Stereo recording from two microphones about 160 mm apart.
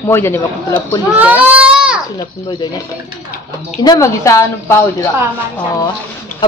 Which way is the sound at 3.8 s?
20° left (ahead or behind).